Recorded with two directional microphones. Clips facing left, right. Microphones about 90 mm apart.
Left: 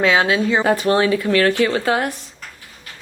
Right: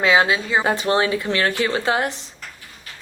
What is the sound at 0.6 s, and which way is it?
A woman's voice, 20° right (ahead or behind).